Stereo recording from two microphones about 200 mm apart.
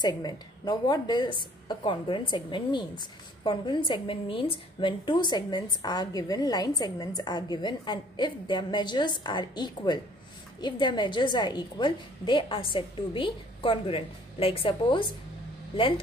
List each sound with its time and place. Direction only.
0.0 s a woman's voice: 20° left (ahead or behind)